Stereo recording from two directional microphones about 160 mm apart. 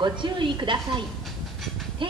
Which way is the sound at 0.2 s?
30° right (ahead or behind).